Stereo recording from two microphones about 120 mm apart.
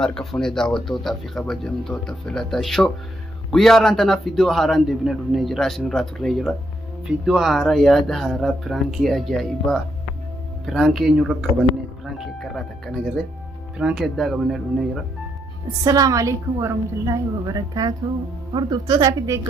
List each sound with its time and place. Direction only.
0.0 s a man's voice: 5° left (ahead or behind)
15.8 s a woman's voice: 30° right (ahead or behind)